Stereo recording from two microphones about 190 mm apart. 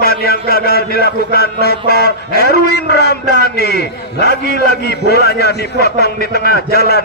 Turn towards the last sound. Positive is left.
turn(degrees=55)  # may be behind; listen again after turning